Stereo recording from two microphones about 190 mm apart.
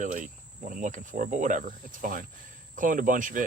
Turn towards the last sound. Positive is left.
turn(degrees=-45)  # may be behind; listen again after turning